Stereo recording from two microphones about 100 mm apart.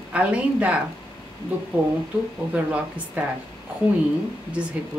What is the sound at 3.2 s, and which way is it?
Speech, 15° right (ahead or behind).